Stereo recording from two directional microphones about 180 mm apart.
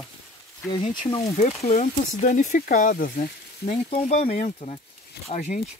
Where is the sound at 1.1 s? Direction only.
35° left (ahead or behind).